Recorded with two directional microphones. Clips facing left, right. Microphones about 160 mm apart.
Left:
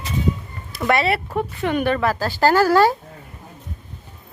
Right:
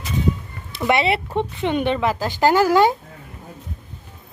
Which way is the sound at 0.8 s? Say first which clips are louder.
Even; 20° right (ahead or behind).